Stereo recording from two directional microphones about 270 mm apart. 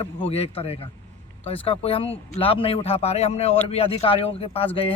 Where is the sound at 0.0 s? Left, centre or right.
Left.